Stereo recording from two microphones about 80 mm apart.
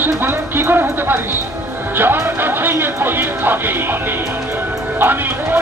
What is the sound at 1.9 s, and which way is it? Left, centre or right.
Speech, right.